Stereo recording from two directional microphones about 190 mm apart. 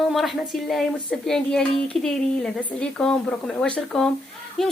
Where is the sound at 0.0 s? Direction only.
Centre (ahead or behind).